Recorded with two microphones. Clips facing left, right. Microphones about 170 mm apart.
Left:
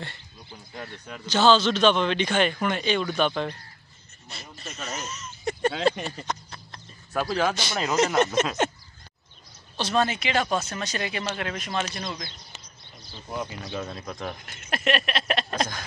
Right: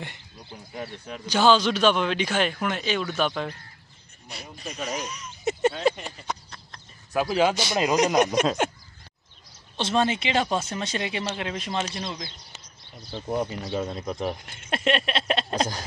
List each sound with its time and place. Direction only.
0.0 s speech: 15° right (ahead or behind)
7.1 s speech: 15° right (ahead or behind)
9.8 s speech: 25° right (ahead or behind)
13.7 s speech: 20° right (ahead or behind)